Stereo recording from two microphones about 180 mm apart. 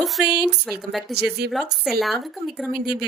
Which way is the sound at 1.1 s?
65° right (ahead or behind).